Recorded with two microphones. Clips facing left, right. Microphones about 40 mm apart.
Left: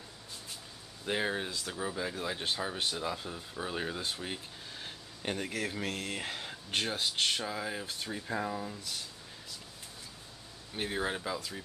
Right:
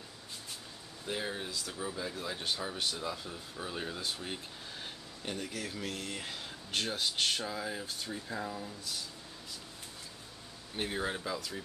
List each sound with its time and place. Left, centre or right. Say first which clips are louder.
1.0 s speech: left 5 dB; left
3.3 s speech: left 3 dB; centre
5.2 s speech: left 4 dB; left
6.1 s speech: left 3 dB; left
6.9 s speech: even; centre
7.8 s speech: left 1 dB; left
10.8 s speech: left 1 dB; centre